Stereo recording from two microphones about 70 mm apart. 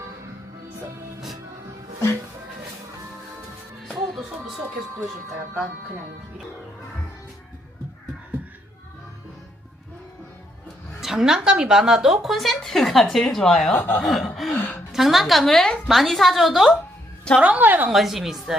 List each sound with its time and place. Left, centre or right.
3.8 s music: centre
11.0 s a woman's voice: centre
13.7 s speech: left
14.0 s a woman's voice: centre
14.5 s a woman's voice: left
14.9 s a woman's voice: centre
17.3 s a woman's voice: centre
17.9 s a woman's voice: centre